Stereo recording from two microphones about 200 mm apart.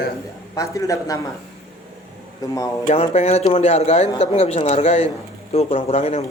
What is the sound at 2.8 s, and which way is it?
A woman's voice, 35° left (ahead or behind).